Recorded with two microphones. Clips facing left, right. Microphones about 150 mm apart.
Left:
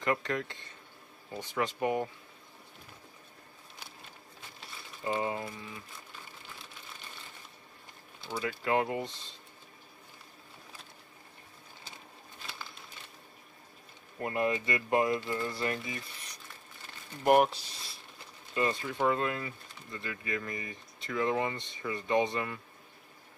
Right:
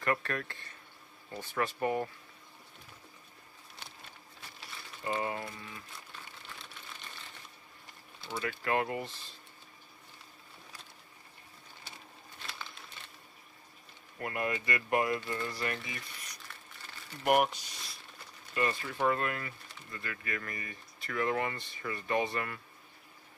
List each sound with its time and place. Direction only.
0.0 s speech: 20° left (ahead or behind)
5.4 s speech: centre (ahead or behind)
8.2 s speech: centre (ahead or behind)
8.6 s speech: 20° left (ahead or behind)
12.4 s crumpling: 5° left (ahead or behind)
14.1 s speech: 25° left (ahead or behind)
17.3 s speech: 30° left (ahead or behind)
18.5 s speech: 20° left (ahead or behind)